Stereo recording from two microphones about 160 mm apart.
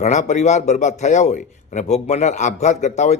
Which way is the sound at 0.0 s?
50° left (ahead or behind).